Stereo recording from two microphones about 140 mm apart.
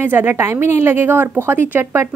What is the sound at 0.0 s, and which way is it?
A woman's voice, 15° right (ahead or behind).